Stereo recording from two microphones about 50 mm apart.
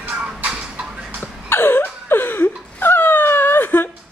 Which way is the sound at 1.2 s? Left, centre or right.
Left.